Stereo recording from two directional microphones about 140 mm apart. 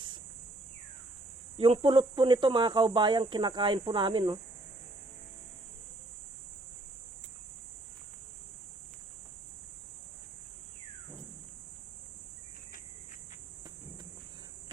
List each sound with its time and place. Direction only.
1.5 s speech: 40° right (ahead or behind)